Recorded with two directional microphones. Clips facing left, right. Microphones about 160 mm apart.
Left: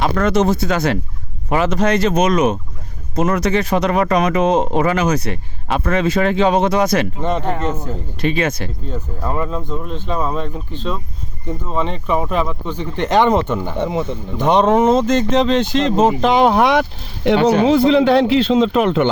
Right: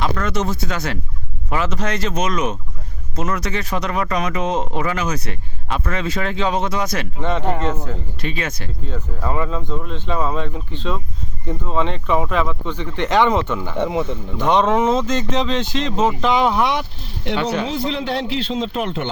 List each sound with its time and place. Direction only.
0.0 s speech: 65° left (ahead or behind)
7.2 s speech: 10° left (ahead or behind)
8.2 s a man's voice: 65° left (ahead or behind)
8.9 s speech: 5° left (ahead or behind)
12.7 s speech: 45° left (ahead or behind)
14.0 s speech: 10° left (ahead or behind)
14.5 s speech: 45° left (ahead or behind); by 16.8 s 75° left (ahead or behind)
17.2 s speech: 50° left (ahead or behind)
17.8 s a man's voice: 80° left